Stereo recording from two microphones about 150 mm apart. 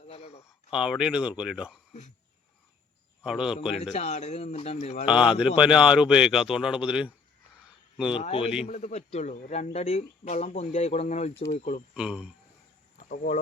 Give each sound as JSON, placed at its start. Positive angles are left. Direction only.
{"t": 0.1, "sound": "a sound", "side_deg": 45}
{"t": 0.4, "sound": "a man's voice", "side_deg": -5}
{"t": 1.9, "sound": "speech", "side_deg": 50}
{"t": 3.2, "sound": "a man's voice", "side_deg": -5}
{"t": 3.8, "sound": "speech", "side_deg": 45}
{"t": 5.0, "sound": "a man's voice", "side_deg": -5}
{"t": 8.1, "sound": "a man's voice", "side_deg": 40}
{"t": 8.6, "sound": "speech", "side_deg": 50}
{"t": 11.9, "sound": "speech", "side_deg": -5}
{"t": 13.1, "sound": "speech", "side_deg": 65}